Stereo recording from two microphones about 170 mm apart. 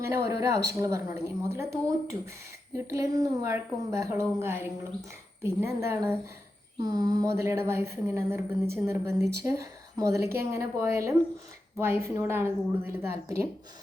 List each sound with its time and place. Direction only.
0.0 s a woman's voice: 20° right (ahead or behind)